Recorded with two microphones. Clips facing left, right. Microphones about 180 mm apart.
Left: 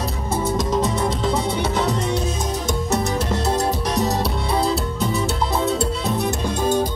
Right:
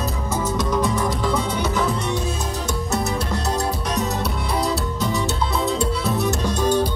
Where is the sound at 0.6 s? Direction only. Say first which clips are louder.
Left 1 dB; 25° left (ahead or behind).